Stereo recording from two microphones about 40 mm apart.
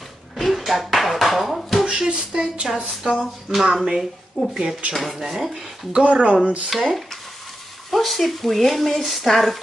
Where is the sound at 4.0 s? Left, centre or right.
Centre.